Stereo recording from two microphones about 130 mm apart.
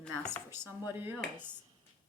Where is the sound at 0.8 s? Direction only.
15° right (ahead or behind).